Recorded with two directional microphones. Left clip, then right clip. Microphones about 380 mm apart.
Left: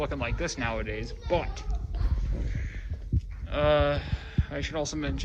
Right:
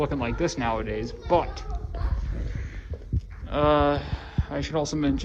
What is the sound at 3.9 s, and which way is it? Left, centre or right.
Speech, centre.